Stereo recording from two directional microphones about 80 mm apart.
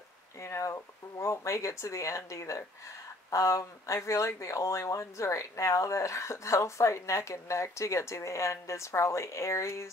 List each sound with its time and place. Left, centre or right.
0.4 s speech: left